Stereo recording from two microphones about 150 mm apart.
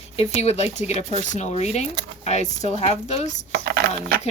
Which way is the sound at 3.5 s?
90° right.